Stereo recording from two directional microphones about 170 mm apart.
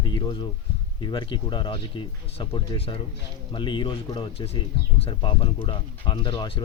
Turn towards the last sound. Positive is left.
turn(degrees=30)  # may be behind; listen again after turning